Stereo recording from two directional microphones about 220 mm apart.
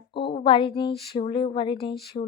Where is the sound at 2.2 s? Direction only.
30° left (ahead or behind).